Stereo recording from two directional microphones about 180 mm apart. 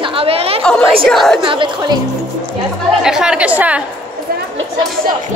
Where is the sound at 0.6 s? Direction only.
5° left (ahead or behind).